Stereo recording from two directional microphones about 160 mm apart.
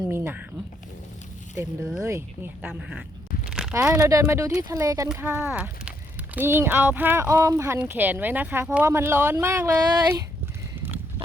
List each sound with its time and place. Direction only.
0.1 s speech: 15° right (ahead or behind)
2.0 s speech: 15° right (ahead or behind)
2.6 s speech: 5° right (ahead or behind)
3.5 s a sound: 5° right (ahead or behind)
3.8 s speech: 15° right (ahead or behind)
10.8 s a sound: 15° right (ahead or behind)